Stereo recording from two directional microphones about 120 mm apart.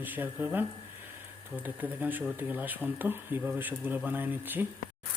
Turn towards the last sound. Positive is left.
turn(degrees=-15)  # may be behind; listen again after turning